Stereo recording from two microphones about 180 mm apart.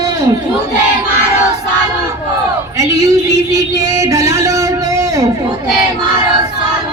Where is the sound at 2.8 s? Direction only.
15° right (ahead or behind).